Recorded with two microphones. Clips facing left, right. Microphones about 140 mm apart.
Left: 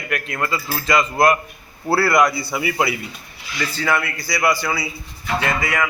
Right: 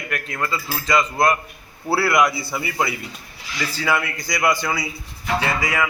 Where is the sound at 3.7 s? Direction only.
10° right (ahead or behind).